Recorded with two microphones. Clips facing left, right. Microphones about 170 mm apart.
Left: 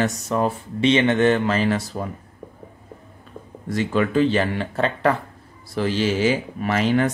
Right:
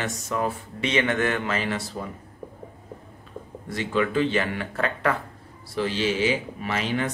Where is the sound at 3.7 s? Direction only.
40° left (ahead or behind).